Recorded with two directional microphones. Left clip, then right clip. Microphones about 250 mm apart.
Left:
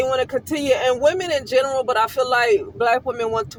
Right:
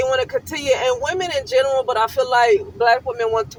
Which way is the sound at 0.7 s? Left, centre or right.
Left.